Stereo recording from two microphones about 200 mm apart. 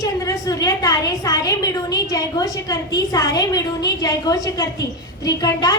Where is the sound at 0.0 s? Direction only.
15° left (ahead or behind).